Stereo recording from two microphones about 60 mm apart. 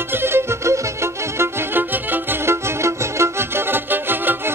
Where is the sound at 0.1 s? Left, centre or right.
Right.